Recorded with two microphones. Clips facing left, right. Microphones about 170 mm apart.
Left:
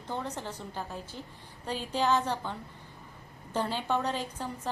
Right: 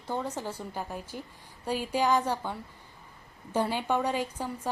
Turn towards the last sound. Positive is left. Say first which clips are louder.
# right 3 dB
turn(degrees=-10)  # may be behind; listen again after turning